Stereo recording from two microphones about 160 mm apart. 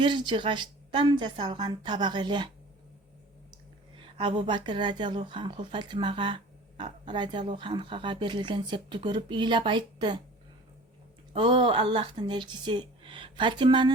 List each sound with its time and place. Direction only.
0.0 s speech: 30° right (ahead or behind)
4.0 s a sound: 30° right (ahead or behind)
4.4 s speech: 30° right (ahead or behind)
11.3 s speech: 35° right (ahead or behind)